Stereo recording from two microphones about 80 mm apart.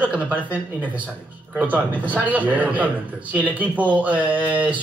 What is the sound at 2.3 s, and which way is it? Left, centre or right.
Speech, centre.